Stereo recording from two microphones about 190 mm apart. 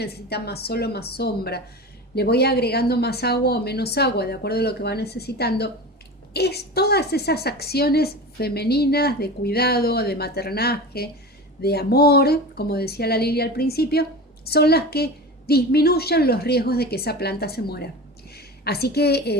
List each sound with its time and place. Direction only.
0.0 s a woman's voice: 60° left (ahead or behind)